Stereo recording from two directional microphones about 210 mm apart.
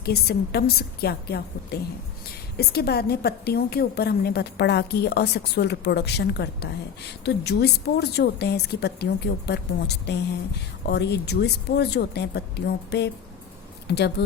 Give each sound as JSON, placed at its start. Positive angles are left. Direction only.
{"t": 0.0, "sound": "a woman's voice", "side_deg": 50}